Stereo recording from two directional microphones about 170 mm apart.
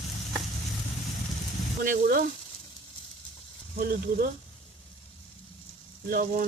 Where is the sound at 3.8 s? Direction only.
65° right (ahead or behind).